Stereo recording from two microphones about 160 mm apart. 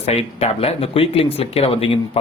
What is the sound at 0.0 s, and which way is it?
Speech, 40° left (ahead or behind).